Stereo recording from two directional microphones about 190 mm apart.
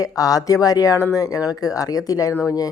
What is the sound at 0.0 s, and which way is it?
Speech, 20° left (ahead or behind).